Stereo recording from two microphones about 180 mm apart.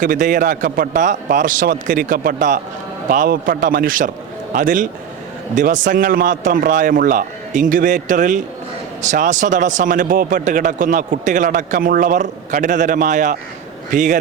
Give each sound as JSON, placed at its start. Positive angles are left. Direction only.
{"t": 0.0, "sound": "speech", "side_deg": -45}